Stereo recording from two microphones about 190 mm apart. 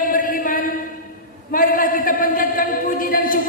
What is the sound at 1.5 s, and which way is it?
A man's voice, 45° left (ahead or behind).